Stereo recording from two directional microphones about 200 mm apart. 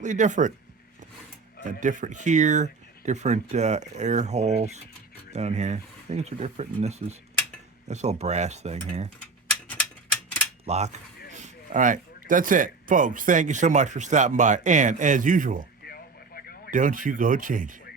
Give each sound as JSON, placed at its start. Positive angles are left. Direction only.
{"t": 0.0, "sound": "speech", "side_deg": -35}
{"t": 1.8, "sound": "speech", "side_deg": -40}
{"t": 10.7, "sound": "speech", "side_deg": -35}
{"t": 15.8, "sound": "a sound", "side_deg": 50}
{"t": 16.7, "sound": "speech", "side_deg": -40}